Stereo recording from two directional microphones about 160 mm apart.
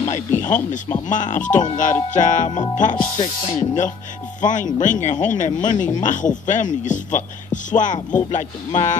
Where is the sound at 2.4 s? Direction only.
30° left (ahead or behind).